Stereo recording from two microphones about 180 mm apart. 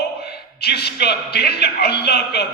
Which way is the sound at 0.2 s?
60° left (ahead or behind).